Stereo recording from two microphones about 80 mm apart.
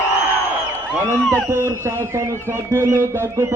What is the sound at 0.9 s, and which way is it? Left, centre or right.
A man's voice, right.